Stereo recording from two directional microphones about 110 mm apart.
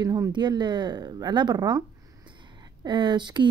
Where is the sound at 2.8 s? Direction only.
45° right (ahead or behind).